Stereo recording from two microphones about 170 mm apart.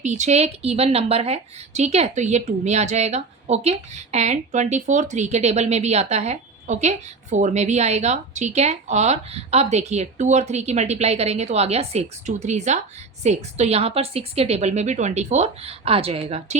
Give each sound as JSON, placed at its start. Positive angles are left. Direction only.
{"t": 0.0, "sound": "a woman's voice", "side_deg": -45}